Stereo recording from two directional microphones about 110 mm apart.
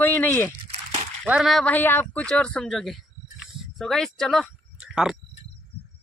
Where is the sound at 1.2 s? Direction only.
10° right (ahead or behind).